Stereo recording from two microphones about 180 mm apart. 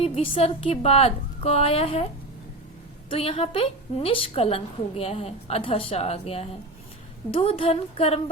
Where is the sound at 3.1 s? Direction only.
30° left (ahead or behind).